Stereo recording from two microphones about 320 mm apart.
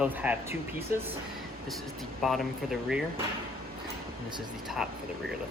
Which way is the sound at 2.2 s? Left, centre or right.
Centre.